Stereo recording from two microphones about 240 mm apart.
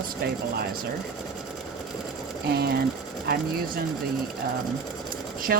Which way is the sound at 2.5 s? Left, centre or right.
Right.